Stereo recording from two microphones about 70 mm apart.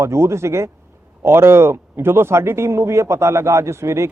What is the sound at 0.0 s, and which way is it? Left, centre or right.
Speech, right.